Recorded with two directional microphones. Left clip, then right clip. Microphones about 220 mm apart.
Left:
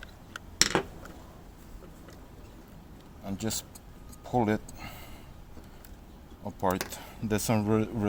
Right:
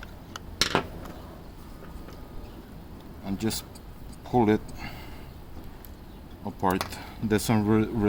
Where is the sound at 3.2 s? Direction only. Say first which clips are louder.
Right 4 dB; 35° left (ahead or behind).